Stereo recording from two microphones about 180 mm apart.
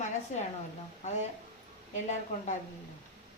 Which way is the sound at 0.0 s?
40° left (ahead or behind).